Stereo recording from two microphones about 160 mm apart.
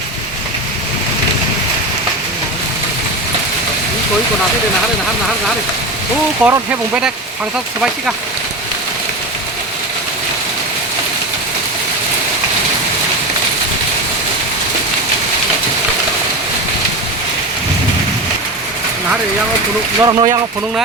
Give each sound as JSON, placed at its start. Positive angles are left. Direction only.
{"t": 6.4, "sound": "speech", "side_deg": -10}
{"t": 20.0, "sound": "speech", "side_deg": -30}